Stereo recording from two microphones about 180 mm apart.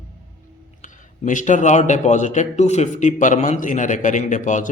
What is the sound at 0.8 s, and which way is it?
A man's voice, 45° left (ahead or behind).